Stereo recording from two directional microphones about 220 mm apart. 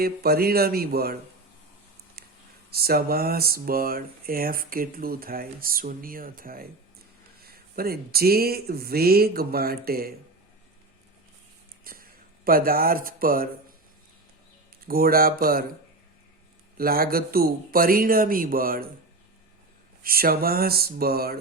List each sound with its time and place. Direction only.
0.0 s speech: 45° right (ahead or behind)
2.6 s speech: 45° right (ahead or behind)
11.9 s a sound: 40° right (ahead or behind)
12.5 s speech: 40° right (ahead or behind)
14.8 s speech: 40° right (ahead or behind)
16.7 s speech: 40° right (ahead or behind)
20.0 s speech: 40° right (ahead or behind)